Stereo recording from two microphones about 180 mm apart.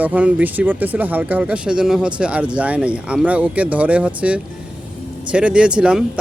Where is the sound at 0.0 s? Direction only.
10° right (ahead or behind).